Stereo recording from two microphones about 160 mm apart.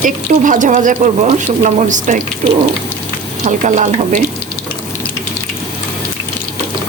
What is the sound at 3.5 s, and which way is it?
Speech, 50° right (ahead or behind).